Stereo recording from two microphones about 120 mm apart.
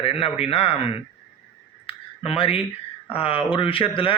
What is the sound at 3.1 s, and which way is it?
A man's voice, 50° left (ahead or behind).